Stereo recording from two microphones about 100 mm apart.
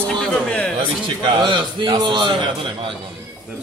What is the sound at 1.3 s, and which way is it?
A man's voice, 50° right (ahead or behind).